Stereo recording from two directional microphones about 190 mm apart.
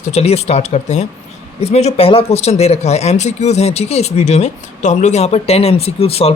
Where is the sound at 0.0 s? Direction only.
35° left (ahead or behind).